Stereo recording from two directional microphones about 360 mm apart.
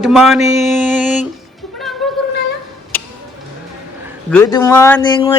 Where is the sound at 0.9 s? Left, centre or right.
Centre.